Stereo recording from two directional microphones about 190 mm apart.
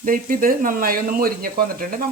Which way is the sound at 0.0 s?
45° right (ahead or behind).